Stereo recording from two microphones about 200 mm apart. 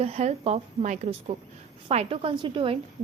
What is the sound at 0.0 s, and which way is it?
A woman's voice, 30° right (ahead or behind).